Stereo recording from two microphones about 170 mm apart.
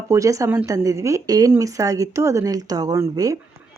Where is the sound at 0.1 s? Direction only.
20° right (ahead or behind).